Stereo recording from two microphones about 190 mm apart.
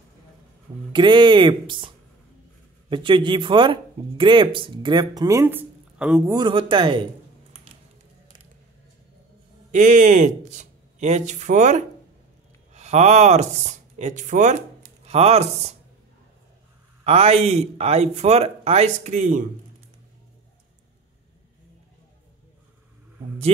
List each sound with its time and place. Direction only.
0.9 s speech: 25° right (ahead or behind)
2.9 s speech: 25° right (ahead or behind); by 6.3 s 5° right (ahead or behind)
6.3 s speech: 25° right (ahead or behind)
9.7 s speech: 40° right (ahead or behind)
17.0 s speech: 30° right (ahead or behind)